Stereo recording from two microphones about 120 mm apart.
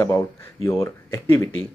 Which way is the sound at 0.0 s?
25° left (ahead or behind).